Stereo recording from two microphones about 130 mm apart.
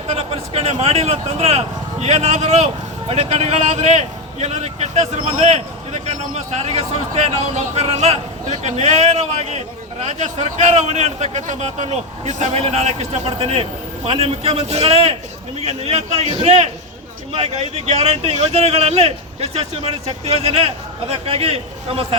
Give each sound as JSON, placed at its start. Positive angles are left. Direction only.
{"t": 0.1, "sound": "a man's voice", "side_deg": -50}